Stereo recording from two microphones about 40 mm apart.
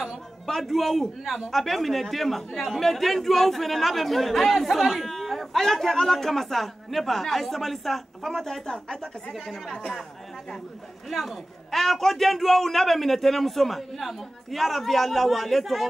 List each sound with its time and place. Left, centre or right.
0.5 s a man's voice: centre
9.3 s a man's voice: centre
11.1 s a man's voice: centre